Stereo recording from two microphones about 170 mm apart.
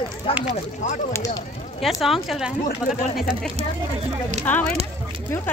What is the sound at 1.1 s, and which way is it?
Speech, 20° left (ahead or behind).